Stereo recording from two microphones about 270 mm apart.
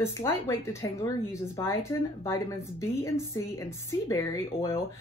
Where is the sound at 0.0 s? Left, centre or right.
Centre.